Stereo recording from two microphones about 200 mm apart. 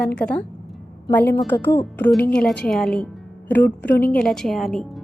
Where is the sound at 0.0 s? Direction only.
5° left (ahead or behind).